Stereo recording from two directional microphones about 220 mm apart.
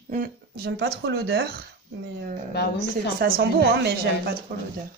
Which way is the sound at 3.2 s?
45° right (ahead or behind).